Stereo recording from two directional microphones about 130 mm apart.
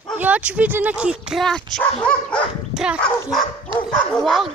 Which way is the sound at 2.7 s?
5° right (ahead or behind).